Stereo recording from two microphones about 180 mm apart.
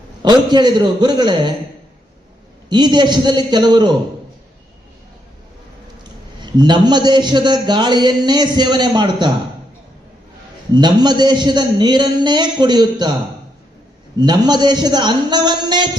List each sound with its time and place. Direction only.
0.2 s a man's voice: 25° right (ahead or behind)
2.6 s a man's voice: 25° right (ahead or behind)
6.4 s a man's voice: 25° right (ahead or behind)
10.8 s a man's voice: 25° right (ahead or behind)
14.2 s a man's voice: 25° right (ahead or behind)